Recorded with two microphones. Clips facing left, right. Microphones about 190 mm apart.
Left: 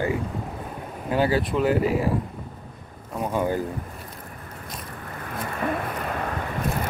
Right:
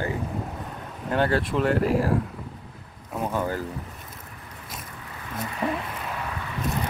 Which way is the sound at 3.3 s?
15° left (ahead or behind).